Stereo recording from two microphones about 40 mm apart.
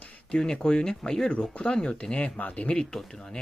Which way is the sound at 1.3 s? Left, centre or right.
Left.